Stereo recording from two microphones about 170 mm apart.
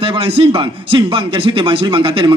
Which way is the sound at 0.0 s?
30° right (ahead or behind).